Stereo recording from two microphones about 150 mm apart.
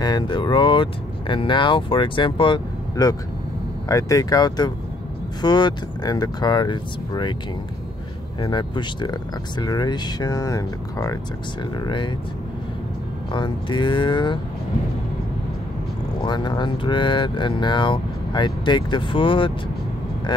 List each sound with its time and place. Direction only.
0.0 s speech: 30° left (ahead or behind)
8.4 s speech: 30° left (ahead or behind)
13.3 s speech: 30° left (ahead or behind)
16.2 s speech: 30° left (ahead or behind)